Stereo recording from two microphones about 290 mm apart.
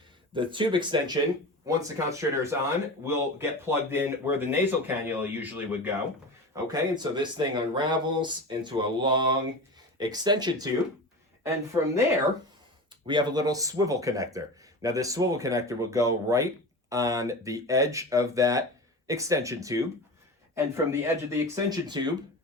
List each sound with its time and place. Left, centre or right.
0.3 s speech: centre
13.1 s speech: centre